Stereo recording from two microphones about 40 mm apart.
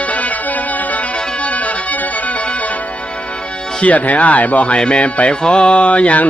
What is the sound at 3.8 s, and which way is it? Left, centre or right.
Speech, left.